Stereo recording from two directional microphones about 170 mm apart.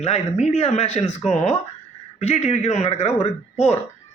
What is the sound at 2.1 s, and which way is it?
Speech, 40° left (ahead or behind).